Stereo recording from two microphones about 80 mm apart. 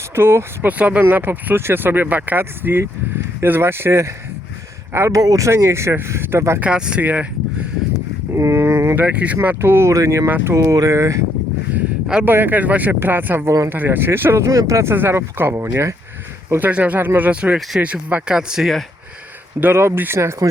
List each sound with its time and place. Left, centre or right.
0.2 s speech: right
5.2 s speech: right
5.5 s speech: right
6.6 s speech: centre
8.4 s speech: right
9.0 s speech: right
10.2 s speech: right
10.5 s speech: right
12.2 s speech: right
14.9 s speech: right
16.5 s speech: right; by 18.7 s centre
19.5 s speech: right